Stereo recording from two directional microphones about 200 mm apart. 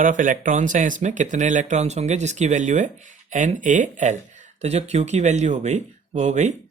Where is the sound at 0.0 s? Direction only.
40° right (ahead or behind).